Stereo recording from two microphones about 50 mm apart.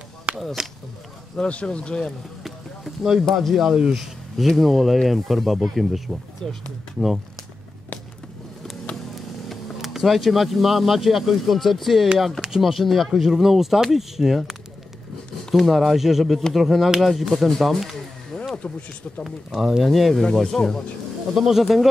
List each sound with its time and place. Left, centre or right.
0.3 s a sound: right
1.3 s speech: left
2.4 s a sound: centre
3.3 s speech: centre
6.4 s speech: centre
9.1 s speech: centre
18.6 s speech: left
19.2 s speech: centre
21.4 s speech: centre